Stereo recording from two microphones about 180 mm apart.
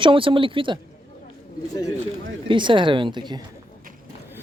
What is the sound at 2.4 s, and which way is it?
Speech, 25° right (ahead or behind).